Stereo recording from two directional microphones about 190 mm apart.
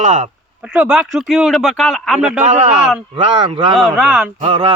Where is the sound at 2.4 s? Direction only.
35° right (ahead or behind).